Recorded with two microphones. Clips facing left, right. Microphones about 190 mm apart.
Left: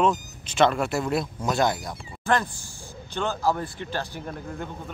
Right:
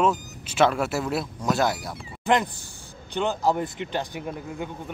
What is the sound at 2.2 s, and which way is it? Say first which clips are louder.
Speech: right 2 dB; 20° right (ahead or behind).